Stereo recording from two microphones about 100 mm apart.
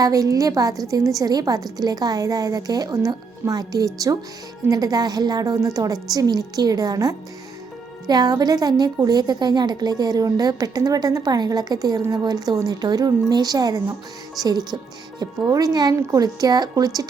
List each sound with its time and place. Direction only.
0.0 s a woman's voice: 35° right (ahead or behind)